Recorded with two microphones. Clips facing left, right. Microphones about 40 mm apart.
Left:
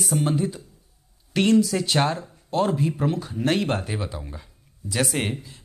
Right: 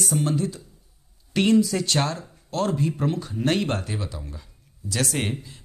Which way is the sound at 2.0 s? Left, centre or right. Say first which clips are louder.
Left 3 dB; centre.